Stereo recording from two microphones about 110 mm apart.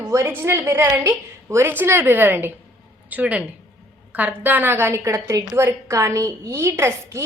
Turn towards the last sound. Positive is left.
turn(degrees=-25)  # may be behind; listen again after turning